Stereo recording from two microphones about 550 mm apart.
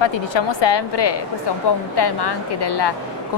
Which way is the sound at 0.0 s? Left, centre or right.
Left.